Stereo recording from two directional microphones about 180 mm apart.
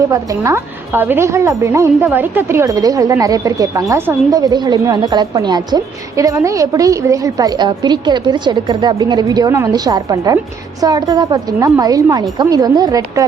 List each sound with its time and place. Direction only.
0.1 s a woman's voice: 15° right (ahead or behind)